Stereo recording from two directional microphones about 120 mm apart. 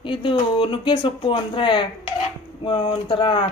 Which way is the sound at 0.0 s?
45° left (ahead or behind).